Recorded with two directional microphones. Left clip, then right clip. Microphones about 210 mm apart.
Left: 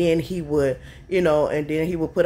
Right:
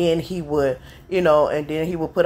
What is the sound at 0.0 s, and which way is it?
A man's voice, 10° left (ahead or behind).